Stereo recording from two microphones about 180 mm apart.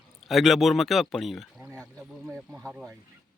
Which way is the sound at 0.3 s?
Centre (ahead or behind).